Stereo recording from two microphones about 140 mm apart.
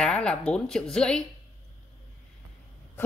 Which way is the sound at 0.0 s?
5° left (ahead or behind).